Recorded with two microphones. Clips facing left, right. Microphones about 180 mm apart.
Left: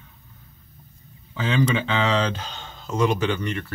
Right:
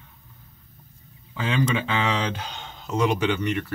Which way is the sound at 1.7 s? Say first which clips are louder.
Left 2 dB; 10° right (ahead or behind).